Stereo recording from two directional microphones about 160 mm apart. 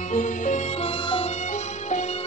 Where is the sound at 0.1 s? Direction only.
50° left (ahead or behind).